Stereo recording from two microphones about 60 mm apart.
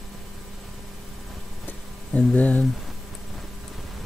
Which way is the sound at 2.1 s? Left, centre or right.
Left.